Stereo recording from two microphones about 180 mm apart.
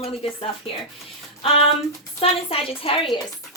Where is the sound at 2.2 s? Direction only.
30° left (ahead or behind).